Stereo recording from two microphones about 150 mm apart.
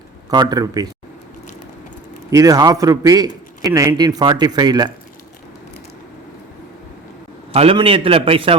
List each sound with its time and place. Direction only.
0.3 s a man's voice: 30° right (ahead or behind)
2.3 s a man's voice: 25° right (ahead or behind)
7.5 s a man's voice: 40° right (ahead or behind)